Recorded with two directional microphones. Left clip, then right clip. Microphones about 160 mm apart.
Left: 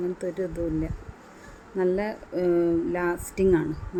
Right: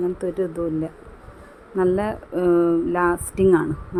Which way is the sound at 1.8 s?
15° right (ahead or behind).